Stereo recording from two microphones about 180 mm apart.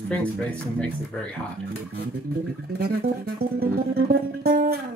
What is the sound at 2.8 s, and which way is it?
Music, 60° right (ahead or behind).